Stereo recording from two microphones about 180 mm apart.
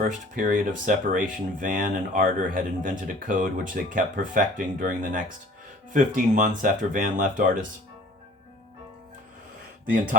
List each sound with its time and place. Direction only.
0.0 s speech: 50° right (ahead or behind)